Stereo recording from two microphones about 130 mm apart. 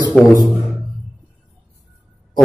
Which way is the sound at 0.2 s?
Centre (ahead or behind).